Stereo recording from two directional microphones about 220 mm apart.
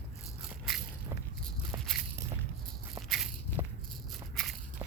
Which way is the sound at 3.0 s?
Centre (ahead or behind).